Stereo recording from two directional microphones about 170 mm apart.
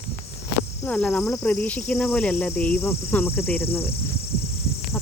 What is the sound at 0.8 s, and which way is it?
Cricket, 10° left (ahead or behind).